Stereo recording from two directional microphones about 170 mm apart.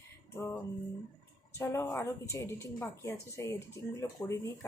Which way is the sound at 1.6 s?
15° left (ahead or behind).